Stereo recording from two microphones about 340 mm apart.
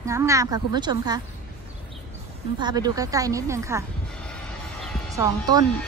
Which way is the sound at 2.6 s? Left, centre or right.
Centre.